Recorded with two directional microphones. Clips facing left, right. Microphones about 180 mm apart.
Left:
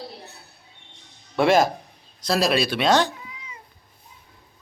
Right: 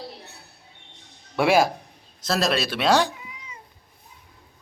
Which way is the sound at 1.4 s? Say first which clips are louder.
Left 1 dB; 10° right (ahead or behind).